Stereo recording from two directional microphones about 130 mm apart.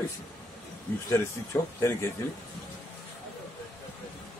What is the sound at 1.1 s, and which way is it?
Speech, 25° left (ahead or behind).